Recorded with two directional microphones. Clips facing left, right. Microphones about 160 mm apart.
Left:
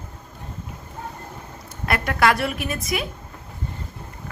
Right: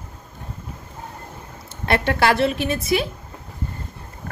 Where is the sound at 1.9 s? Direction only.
30° right (ahead or behind).